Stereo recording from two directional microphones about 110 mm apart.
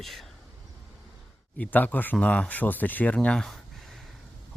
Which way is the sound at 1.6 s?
15° left (ahead or behind).